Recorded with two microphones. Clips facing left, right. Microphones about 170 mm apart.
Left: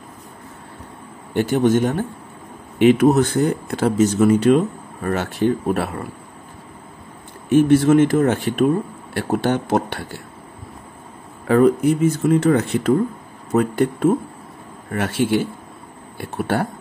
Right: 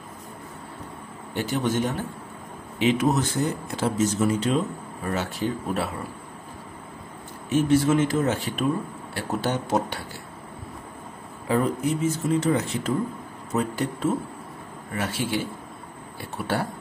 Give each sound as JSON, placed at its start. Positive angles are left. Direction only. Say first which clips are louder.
{"t": 1.3, "sound": "a man's voice", "louder": "left 9 dB", "side_deg": 55}
{"t": 7.4, "sound": "speech", "louder": "left 7 dB", "side_deg": 55}
{"t": 11.4, "sound": "a man's voice", "louder": "left 9 dB", "side_deg": 65}